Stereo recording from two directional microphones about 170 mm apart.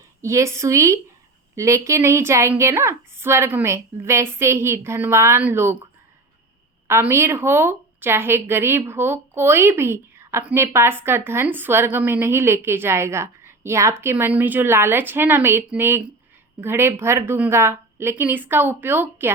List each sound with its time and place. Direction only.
0.2 s a woman's voice: 15° right (ahead or behind)
6.8 s a woman's voice: 15° right (ahead or behind)